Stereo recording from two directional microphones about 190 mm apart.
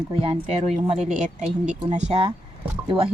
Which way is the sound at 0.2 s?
30° right (ahead or behind).